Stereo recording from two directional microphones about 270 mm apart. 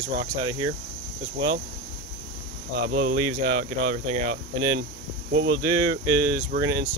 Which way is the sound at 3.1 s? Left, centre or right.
Right.